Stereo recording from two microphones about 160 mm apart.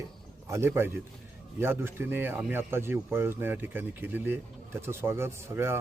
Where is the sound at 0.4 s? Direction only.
15° right (ahead or behind).